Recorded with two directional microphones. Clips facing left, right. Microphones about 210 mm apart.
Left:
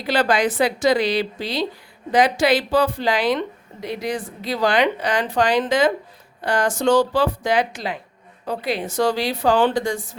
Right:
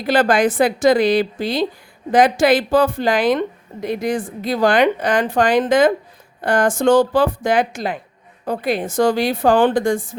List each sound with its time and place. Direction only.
0.0 s a woman's voice: 50° right (ahead or behind)